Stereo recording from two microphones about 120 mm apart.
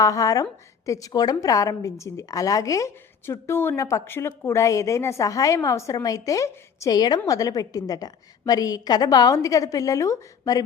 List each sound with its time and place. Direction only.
0.0 s a woman's voice: 30° left (ahead or behind)